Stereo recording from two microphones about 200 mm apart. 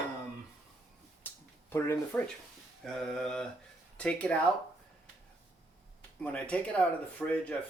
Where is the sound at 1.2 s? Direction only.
10° left (ahead or behind).